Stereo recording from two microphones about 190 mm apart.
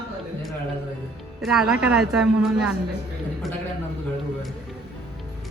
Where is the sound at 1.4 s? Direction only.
Centre (ahead or behind).